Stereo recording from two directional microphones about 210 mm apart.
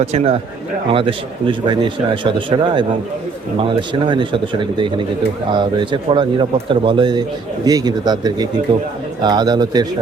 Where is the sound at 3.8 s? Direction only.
25° right (ahead or behind).